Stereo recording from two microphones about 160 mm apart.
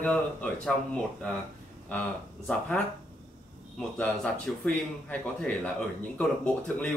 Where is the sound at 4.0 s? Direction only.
5° left (ahead or behind).